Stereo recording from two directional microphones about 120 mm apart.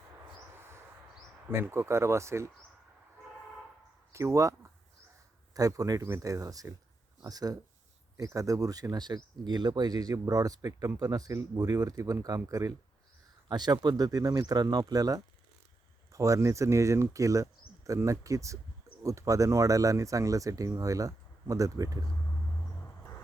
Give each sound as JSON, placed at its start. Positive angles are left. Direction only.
{"t": 1.5, "sound": "speech", "side_deg": -20}
{"t": 4.1, "sound": "speech", "side_deg": -25}